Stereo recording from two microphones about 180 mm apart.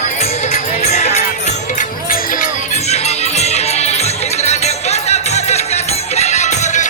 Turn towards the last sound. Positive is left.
turn(degrees=40)  # may be behind; listen again after turning